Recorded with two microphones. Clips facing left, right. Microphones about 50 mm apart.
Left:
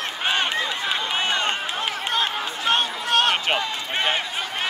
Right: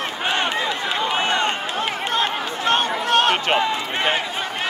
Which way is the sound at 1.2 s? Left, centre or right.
Right.